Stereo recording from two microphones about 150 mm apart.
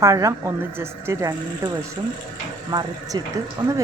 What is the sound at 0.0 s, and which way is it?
Speech, 20° right (ahead or behind).